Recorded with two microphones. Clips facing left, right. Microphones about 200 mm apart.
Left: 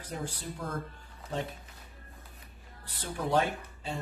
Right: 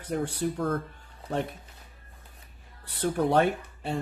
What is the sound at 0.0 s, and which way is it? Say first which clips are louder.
Speech: right 10 dB; 60° right (ahead or behind).